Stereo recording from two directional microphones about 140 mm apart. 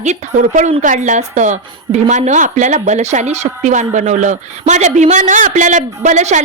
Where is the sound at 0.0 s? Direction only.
55° right (ahead or behind).